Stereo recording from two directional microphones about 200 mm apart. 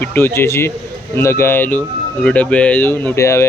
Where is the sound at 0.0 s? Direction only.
10° left (ahead or behind).